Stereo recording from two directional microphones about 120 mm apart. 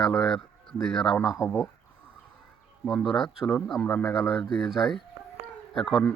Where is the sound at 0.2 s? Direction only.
5° left (ahead or behind).